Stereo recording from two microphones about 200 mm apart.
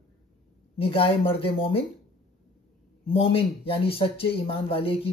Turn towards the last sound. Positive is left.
turn(degrees=30)  # may be behind; listen again after turning